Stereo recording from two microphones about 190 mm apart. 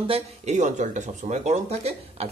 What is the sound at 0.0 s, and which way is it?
Speech, 35° right (ahead or behind).